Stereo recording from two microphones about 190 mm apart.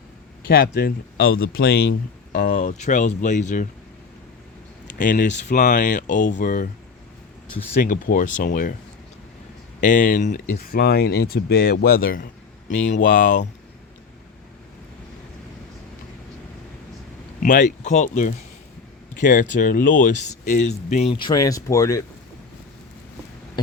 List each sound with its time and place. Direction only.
0.4 s speech: 50° left (ahead or behind)
1.4 s speech: 90° left; by 3.7 s 40° left (ahead or behind)
4.9 s speech: 45° left (ahead or behind)
7.8 s speech: 50° left (ahead or behind)
9.8 s speech: 45° left (ahead or behind)
17.4 s speech: 40° left (ahead or behind); by 22.0 s 15° left (ahead or behind)